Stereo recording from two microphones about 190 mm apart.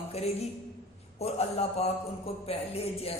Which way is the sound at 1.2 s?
35° left (ahead or behind).